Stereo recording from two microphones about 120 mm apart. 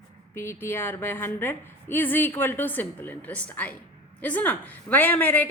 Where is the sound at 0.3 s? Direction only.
20° left (ahead or behind).